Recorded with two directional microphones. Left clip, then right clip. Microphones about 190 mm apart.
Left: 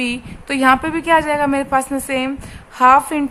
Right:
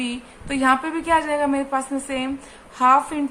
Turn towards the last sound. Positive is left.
turn(degrees=40)  # may be behind; listen again after turning